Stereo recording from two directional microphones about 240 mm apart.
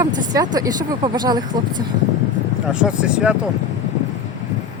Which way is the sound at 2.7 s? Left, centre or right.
Centre.